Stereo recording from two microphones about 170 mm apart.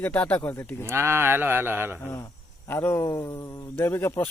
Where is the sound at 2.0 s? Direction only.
15° left (ahead or behind).